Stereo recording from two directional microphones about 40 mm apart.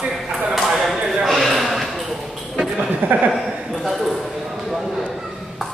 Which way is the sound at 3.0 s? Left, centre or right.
Right.